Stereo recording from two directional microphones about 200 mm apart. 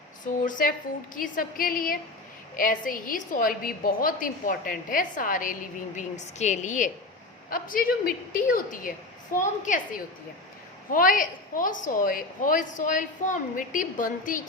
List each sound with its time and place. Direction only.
0.3 s a woman's voice: 40° left (ahead or behind)